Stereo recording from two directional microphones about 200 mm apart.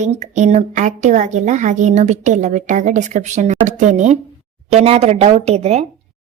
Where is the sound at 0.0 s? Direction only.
35° right (ahead or behind).